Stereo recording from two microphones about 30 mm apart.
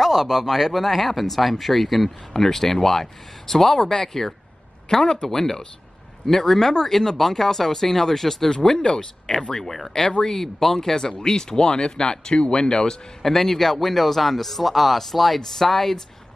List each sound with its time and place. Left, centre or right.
0.0 s speech: centre
2.3 s speech: centre
6.2 s speech: centre
8.5 s speech: left
13.2 s speech: centre